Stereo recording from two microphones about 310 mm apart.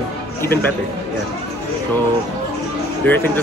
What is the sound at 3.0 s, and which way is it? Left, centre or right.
Speech, centre.